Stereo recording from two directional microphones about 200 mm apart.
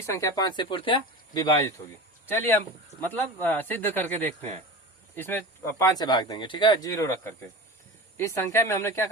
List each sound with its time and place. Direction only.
0.0 s speech: 15° left (ahead or behind)